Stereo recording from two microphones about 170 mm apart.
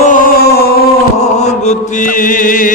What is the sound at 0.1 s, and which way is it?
Music, 65° left (ahead or behind).